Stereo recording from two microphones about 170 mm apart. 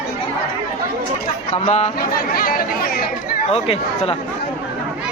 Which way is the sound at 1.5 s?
40° left (ahead or behind).